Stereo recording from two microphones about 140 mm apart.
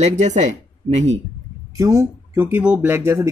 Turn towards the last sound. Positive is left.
turn(degrees=-20)  # may be behind; listen again after turning